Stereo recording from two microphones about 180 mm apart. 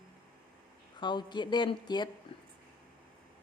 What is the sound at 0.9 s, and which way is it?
Speech, 25° left (ahead or behind).